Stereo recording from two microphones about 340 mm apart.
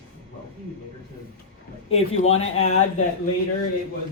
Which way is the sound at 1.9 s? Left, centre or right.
Centre.